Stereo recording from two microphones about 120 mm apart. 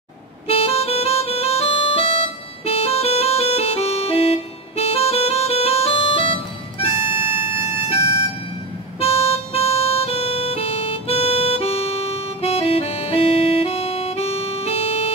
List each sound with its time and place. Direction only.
0.5 s music: 55° left (ahead or behind)
9.0 s harmonica: 50° left (ahead or behind)